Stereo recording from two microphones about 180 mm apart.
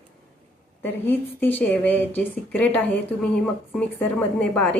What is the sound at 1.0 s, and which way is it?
A woman's voice, 10° left (ahead or behind).